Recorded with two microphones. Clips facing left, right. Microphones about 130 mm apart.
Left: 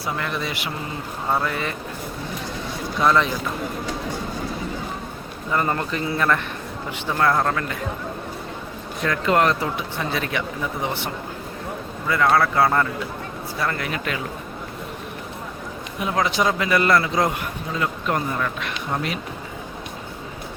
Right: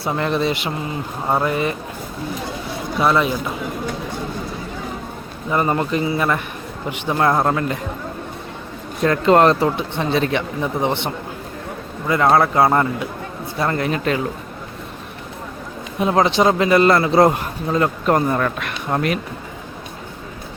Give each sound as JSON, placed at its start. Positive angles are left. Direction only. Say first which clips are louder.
{"t": 0.0, "sound": "a man's voice", "louder": "right 7 dB", "side_deg": -30}
{"t": 3.0, "sound": "a man's voice", "louder": "right 2 dB", "side_deg": -10}
{"t": 5.5, "sound": "a man's voice", "louder": "right 4 dB", "side_deg": -15}
{"t": 9.0, "sound": "a man's voice", "louder": "right 6 dB", "side_deg": -30}
{"t": 16.0, "sound": "a man's voice", "louder": "right 6 dB", "side_deg": -30}